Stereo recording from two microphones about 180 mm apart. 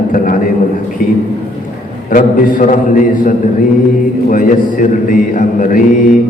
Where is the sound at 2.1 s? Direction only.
50° left (ahead or behind).